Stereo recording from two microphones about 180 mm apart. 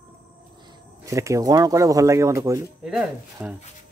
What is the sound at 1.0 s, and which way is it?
Speech, 15° right (ahead or behind).